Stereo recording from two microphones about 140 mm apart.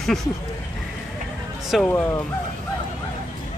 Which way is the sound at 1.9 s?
20° left (ahead or behind).